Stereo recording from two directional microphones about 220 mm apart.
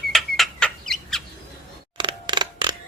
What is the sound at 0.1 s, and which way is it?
Bird, centre (ahead or behind).